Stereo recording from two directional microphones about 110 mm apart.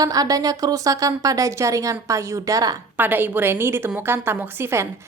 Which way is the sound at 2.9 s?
20° right (ahead or behind).